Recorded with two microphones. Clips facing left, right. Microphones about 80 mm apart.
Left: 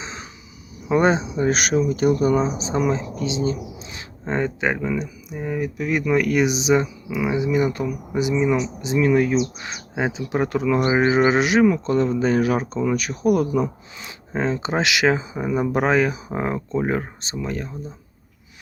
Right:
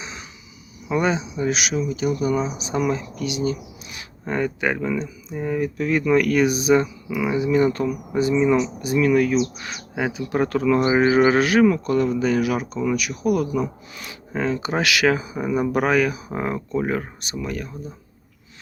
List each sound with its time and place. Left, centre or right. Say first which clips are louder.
0.0 s insect: left 2 dB; left
0.9 s speech: left 4 dB; left